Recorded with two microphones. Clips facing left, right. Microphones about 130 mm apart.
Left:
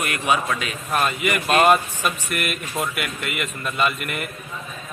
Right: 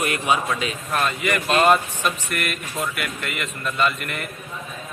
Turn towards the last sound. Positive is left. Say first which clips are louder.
# even
turn(degrees=5)  # may be behind; listen again after turning